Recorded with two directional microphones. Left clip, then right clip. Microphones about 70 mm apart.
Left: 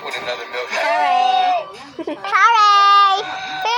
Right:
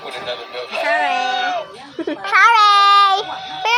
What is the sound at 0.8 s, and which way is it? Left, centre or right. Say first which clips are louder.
Speech: left 2 dB; right.